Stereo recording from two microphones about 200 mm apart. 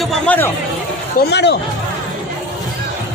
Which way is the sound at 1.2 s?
55° left (ahead or behind).